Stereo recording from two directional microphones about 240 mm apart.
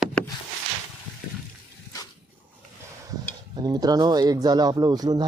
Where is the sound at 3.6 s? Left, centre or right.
Centre.